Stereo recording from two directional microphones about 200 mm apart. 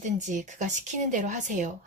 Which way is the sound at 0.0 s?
40° right (ahead or behind).